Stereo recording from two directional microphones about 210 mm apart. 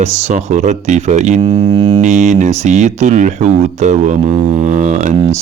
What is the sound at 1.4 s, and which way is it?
Speech, 20° right (ahead or behind).